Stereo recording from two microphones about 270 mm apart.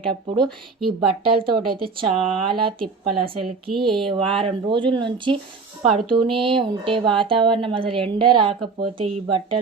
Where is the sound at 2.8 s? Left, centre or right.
Right.